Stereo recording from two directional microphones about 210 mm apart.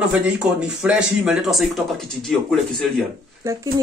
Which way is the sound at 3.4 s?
15° right (ahead or behind).